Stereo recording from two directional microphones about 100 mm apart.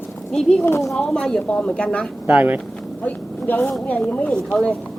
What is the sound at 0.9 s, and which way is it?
Speech, 5° left (ahead or behind).